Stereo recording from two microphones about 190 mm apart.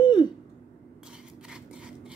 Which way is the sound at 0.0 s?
25° left (ahead or behind).